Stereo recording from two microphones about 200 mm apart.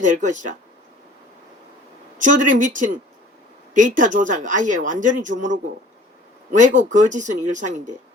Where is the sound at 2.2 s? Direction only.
40° right (ahead or behind).